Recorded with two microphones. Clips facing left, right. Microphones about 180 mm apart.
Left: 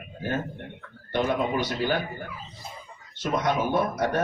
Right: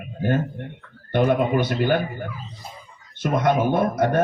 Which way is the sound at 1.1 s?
55° right (ahead or behind).